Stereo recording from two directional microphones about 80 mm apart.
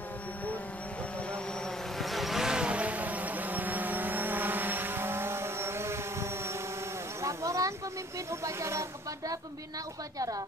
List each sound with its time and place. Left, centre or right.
2.0 s vehicle: centre; by 6.5 s right
7.2 s a sound: right
8.3 s speech: right
10.1 s a woman's voice: right